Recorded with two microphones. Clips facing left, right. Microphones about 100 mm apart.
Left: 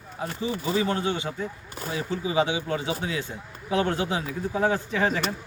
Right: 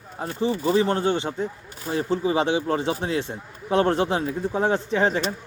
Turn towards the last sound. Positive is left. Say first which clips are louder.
# right 3 dB
turn(degrees=-30)  # may be behind; listen again after turning